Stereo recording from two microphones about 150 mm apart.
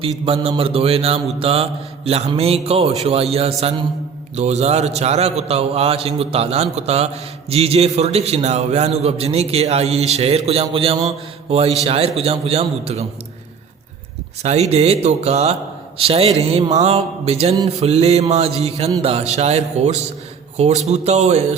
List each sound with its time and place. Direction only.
0.4 s a man's voice: 40° right (ahead or behind)
14.4 s a man's voice: 45° right (ahead or behind)